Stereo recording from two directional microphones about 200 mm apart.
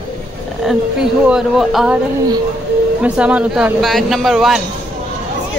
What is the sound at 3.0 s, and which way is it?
Speech, 5° right (ahead or behind).